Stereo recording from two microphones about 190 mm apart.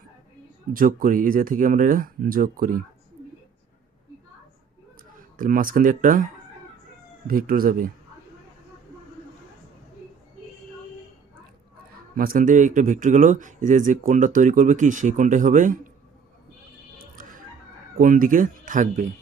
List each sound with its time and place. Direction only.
0.7 s speech: 45° right (ahead or behind)
5.4 s speech: 45° right (ahead or behind)
7.3 s speech: 50° right (ahead or behind)
12.1 s speech: 50° right (ahead or behind)
17.9 s speech: 45° right (ahead or behind)